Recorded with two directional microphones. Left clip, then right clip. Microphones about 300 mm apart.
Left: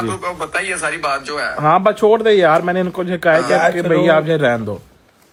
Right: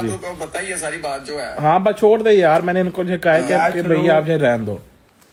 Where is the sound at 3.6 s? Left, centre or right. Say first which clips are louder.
Left 2 dB; left.